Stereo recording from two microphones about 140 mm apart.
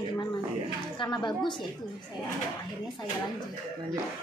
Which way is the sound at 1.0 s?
35° left (ahead or behind).